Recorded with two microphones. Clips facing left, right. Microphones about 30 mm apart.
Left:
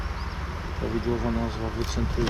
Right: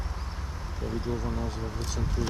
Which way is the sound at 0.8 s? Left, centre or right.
Left.